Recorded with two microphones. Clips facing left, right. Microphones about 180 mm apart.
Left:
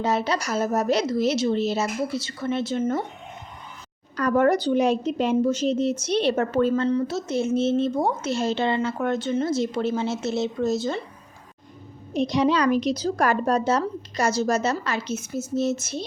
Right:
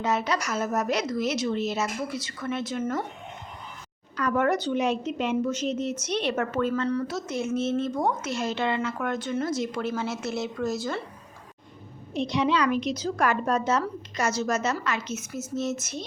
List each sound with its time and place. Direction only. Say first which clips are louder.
0.0 s speech: left 3 dB; 30° left (ahead or behind)
4.2 s speech: left 5 dB; 35° left (ahead or behind)
12.1 s a woman's voice: left 4 dB; 40° left (ahead or behind)